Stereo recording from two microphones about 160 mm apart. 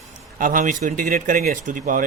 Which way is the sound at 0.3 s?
55° right (ahead or behind).